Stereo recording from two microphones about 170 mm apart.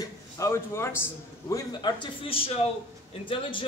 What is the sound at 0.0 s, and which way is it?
A man's voice, 15° left (ahead or behind).